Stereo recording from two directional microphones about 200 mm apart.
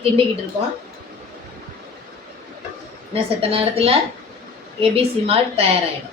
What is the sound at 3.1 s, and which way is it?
Speech, 30° right (ahead or behind).